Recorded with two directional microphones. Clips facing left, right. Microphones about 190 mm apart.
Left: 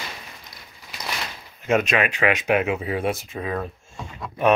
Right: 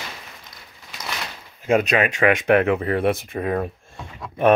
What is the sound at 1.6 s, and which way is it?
Speech, 35° right (ahead or behind).